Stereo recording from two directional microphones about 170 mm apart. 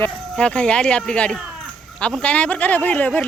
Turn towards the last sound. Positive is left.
turn(degrees=10)  # may be behind; listen again after turning